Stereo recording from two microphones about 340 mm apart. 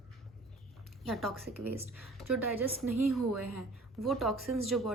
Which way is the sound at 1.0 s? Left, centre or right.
Centre.